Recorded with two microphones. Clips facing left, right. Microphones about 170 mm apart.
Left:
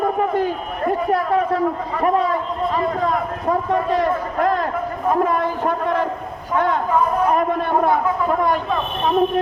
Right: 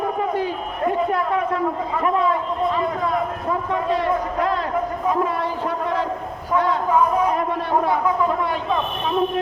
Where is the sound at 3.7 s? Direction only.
45° left (ahead or behind).